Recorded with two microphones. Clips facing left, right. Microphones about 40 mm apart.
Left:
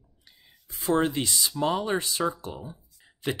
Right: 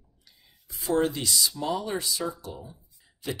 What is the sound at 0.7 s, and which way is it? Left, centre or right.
Speech, left.